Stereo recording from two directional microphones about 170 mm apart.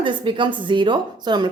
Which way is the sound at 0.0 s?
30° right (ahead or behind).